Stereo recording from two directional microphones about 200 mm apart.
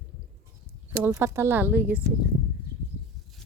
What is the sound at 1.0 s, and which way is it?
Speech, 10° right (ahead or behind).